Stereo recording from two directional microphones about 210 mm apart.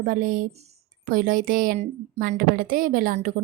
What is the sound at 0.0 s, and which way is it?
A woman's voice, 40° right (ahead or behind).